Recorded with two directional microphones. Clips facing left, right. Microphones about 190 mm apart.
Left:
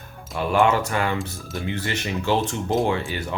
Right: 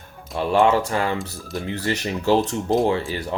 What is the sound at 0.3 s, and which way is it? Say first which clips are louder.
Speech: right 2 dB; 30° right (ahead or behind).